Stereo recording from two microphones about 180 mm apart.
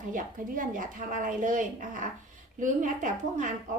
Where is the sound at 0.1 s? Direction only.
50° right (ahead or behind).